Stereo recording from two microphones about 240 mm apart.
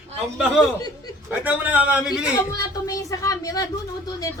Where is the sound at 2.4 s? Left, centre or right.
Centre.